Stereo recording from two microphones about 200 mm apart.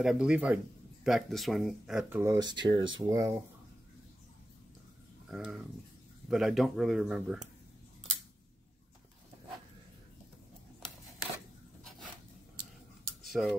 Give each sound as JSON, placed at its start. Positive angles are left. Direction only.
{"t": 0.0, "sound": "speech", "side_deg": -5}
{"t": 5.3, "sound": "speech", "side_deg": -5}
{"t": 13.2, "sound": "cutlery", "side_deg": 0}